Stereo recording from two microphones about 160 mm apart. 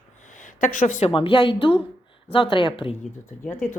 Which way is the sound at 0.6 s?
50° left (ahead or behind).